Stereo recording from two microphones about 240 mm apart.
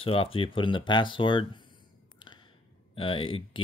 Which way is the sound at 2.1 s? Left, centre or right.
Centre.